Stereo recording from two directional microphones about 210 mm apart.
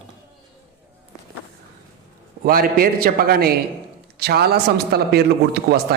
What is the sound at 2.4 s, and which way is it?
Speech, 45° right (ahead or behind).